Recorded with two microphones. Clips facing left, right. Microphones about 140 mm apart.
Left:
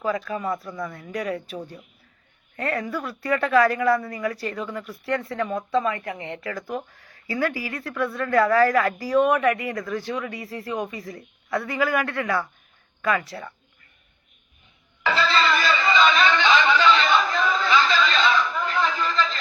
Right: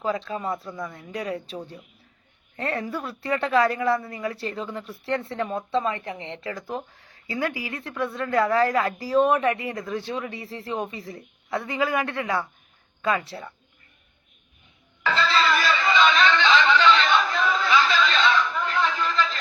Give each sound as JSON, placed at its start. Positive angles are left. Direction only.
{"t": 0.0, "sound": "a woman's voice", "side_deg": -25}
{"t": 15.0, "sound": "snicker", "side_deg": 5}